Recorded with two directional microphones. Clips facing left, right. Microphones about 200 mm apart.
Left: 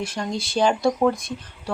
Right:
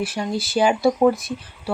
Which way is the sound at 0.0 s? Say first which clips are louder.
Right 3 dB; 5° right (ahead or behind).